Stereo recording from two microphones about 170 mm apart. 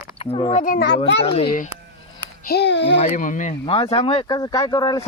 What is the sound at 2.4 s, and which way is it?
Speech, 75° left (ahead or behind).